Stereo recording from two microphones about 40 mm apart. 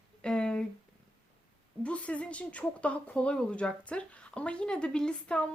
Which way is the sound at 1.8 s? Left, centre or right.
Left.